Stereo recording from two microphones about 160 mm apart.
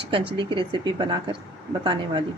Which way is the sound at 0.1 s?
30° right (ahead or behind).